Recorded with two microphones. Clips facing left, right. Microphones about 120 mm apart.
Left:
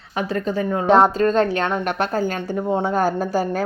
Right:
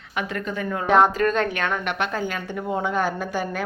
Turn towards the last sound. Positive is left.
turn(degrees=35)  # may be behind; listen again after turning